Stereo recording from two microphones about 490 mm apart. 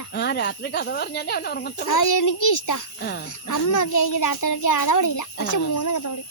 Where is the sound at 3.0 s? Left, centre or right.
Centre.